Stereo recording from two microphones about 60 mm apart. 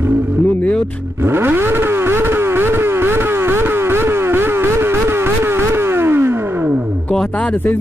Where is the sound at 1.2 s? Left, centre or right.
Right.